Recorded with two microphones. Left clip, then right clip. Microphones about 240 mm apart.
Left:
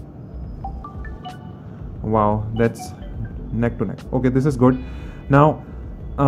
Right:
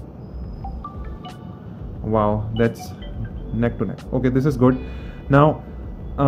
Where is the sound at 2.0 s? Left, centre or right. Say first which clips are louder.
Left 1 dB; centre.